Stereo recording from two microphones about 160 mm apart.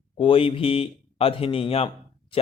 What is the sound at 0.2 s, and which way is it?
Speech, 35° left (ahead or behind).